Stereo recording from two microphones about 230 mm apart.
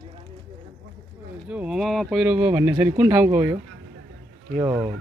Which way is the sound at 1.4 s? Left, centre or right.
Centre.